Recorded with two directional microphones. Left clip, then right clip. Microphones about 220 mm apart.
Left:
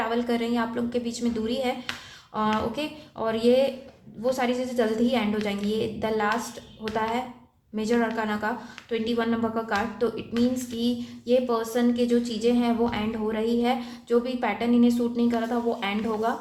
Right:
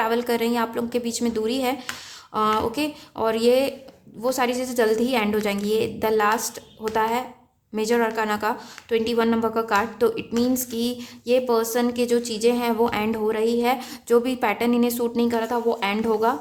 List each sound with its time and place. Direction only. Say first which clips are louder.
0.0 s speech: right 4 dB; 30° right (ahead or behind)